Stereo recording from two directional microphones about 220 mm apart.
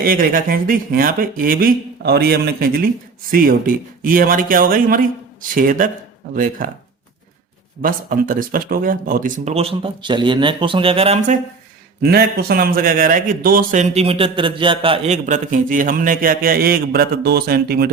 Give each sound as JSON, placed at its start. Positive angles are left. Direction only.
{"t": 0.0, "sound": "a man's voice", "side_deg": -40}
{"t": 7.8, "sound": "speech", "side_deg": -40}
{"t": 12.0, "sound": "a man's voice", "side_deg": -45}